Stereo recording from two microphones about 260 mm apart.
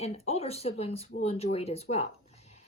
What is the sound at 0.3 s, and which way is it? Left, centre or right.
Speech, left.